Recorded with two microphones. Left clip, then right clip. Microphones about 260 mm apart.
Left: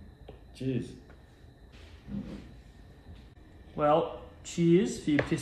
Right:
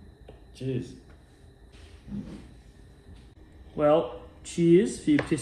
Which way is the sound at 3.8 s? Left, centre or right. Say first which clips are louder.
Right 3 dB; left.